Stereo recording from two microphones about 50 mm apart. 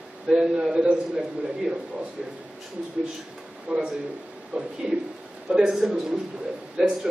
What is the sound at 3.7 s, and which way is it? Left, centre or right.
A man's voice, right.